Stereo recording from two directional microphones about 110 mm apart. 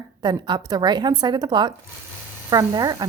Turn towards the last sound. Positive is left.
turn(degrees=-35)  # may be behind; listen again after turning